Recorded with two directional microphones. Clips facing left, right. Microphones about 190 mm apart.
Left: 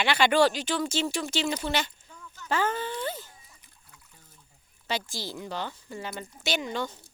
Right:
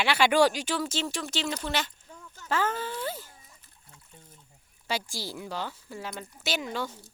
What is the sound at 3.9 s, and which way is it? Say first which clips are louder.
Trickle: right 5 dB; 25° right (ahead or behind).